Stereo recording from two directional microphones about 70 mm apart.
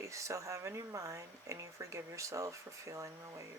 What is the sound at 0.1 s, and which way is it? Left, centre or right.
Speech, right.